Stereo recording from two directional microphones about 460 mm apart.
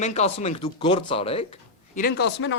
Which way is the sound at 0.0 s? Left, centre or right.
Centre.